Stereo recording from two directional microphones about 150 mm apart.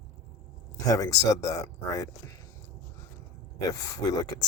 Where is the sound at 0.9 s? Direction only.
25° left (ahead or behind).